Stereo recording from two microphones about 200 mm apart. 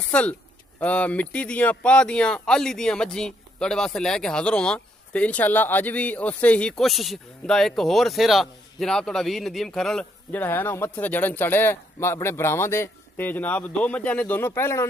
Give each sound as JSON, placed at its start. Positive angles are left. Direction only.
{"t": 0.1, "sound": "speech", "side_deg": 5}